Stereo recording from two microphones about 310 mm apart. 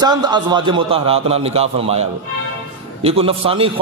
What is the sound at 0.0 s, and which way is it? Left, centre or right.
A man's voice, centre.